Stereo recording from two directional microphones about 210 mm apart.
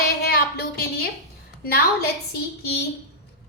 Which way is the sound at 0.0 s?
45° left (ahead or behind).